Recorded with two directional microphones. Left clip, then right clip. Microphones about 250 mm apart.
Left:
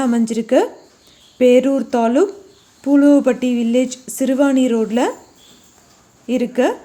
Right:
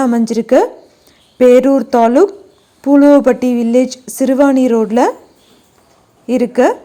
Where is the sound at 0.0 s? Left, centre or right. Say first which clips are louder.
Right 5 dB; centre.